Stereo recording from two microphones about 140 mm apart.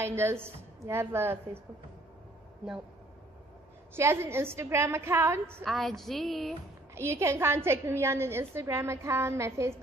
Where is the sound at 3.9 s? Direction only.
15° right (ahead or behind).